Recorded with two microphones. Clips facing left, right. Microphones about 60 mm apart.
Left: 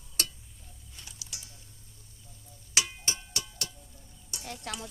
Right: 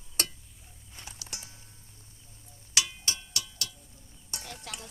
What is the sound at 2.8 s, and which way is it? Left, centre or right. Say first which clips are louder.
Music: even; left.